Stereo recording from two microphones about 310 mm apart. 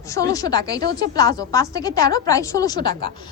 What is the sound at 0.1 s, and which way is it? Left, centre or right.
Speech, centre.